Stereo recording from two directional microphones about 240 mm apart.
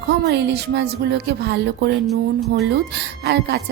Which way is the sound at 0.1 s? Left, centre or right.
Right.